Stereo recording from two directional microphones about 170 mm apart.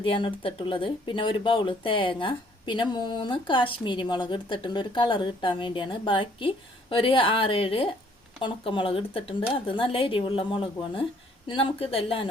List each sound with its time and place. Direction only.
0.0 s speech: 30° left (ahead or behind)